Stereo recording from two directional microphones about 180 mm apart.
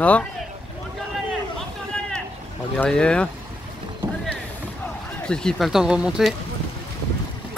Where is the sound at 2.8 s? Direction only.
5° left (ahead or behind).